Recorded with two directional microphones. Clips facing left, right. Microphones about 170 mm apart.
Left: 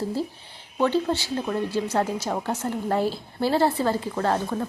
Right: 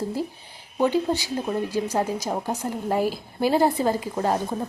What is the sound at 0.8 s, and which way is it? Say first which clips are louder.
A woman's voice: right 1 dB; 15° right (ahead or behind).